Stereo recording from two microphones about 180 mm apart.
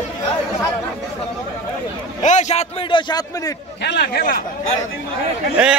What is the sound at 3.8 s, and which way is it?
Speech, 70° left (ahead or behind).